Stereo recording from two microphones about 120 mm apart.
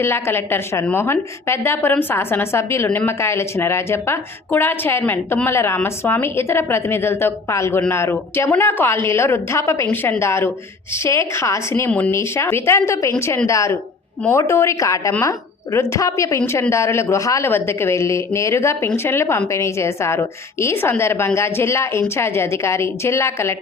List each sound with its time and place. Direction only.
0.0 s a woman's voice: 20° left (ahead or behind)
11.7 s a woman's voice: 15° left (ahead or behind)